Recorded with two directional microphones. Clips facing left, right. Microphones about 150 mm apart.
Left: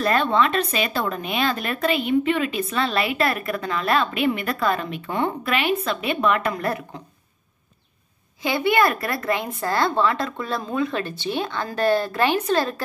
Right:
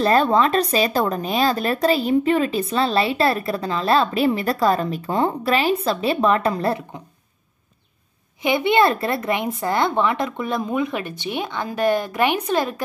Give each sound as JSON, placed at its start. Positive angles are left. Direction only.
{"t": 0.0, "sound": "speech", "side_deg": -35}
{"t": 8.4, "sound": "a woman's voice", "side_deg": -20}